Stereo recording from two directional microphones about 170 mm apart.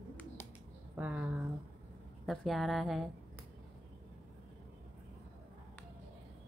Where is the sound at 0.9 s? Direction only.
10° right (ahead or behind).